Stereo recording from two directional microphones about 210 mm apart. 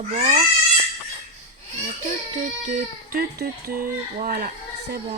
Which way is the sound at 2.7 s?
45° right (ahead or behind).